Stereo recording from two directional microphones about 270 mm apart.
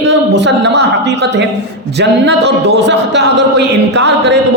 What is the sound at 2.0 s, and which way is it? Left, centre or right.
Speech, right.